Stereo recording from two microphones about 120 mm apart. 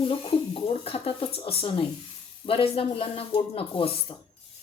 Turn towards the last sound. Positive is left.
turn(degrees=45)  # may be behind; listen again after turning